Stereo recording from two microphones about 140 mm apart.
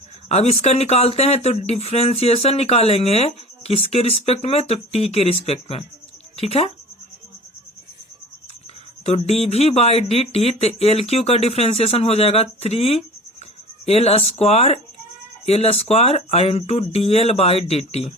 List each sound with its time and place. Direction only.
0.3 s speech: 50° left (ahead or behind)
9.0 s speech: 50° left (ahead or behind)